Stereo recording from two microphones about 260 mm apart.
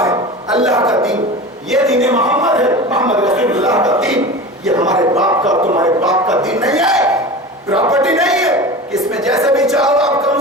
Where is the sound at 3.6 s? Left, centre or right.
Centre.